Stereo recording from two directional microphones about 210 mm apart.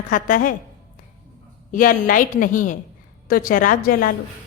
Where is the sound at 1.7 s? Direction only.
40° left (ahead or behind).